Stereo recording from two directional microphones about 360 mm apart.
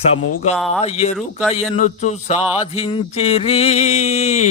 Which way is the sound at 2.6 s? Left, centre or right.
Centre.